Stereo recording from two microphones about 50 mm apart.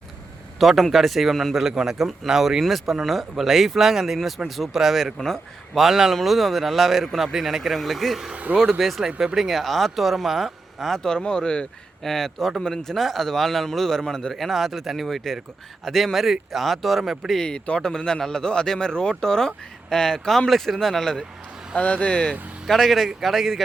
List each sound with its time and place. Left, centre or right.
0.6 s speech: centre
5.8 s speech: centre
8.3 s speech: right
8.8 s speech: centre
12.0 s speech: centre
14.3 s speech: centre
17.3 s speech: centre
21.8 s speech: left
22.6 s speech: centre